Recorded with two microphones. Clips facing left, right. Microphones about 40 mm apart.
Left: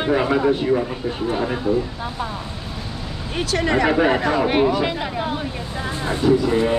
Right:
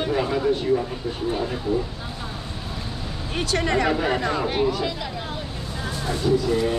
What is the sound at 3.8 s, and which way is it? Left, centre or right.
Speech, left.